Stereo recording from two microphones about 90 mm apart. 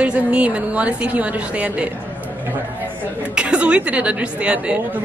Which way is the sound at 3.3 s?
10° right (ahead or behind).